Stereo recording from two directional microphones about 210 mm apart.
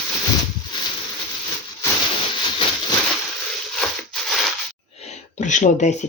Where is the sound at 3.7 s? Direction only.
Centre (ahead or behind).